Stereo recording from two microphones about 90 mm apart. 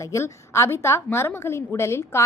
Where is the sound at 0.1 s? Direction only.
35° left (ahead or behind).